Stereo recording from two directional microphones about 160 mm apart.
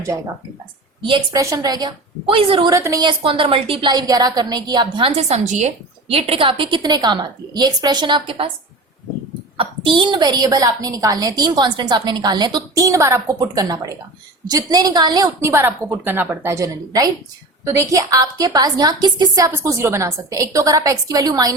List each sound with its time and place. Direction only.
1.0 s a woman's voice: 30° right (ahead or behind)
1.4 s a woman's voice: 20° right (ahead or behind)
2.7 s a woman's voice: 20° right (ahead or behind)
9.6 s a woman's voice: 30° right (ahead or behind)